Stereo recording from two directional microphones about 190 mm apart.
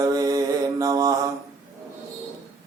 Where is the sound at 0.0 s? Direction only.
20° right (ahead or behind).